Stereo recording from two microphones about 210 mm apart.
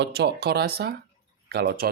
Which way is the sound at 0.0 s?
50° right (ahead or behind).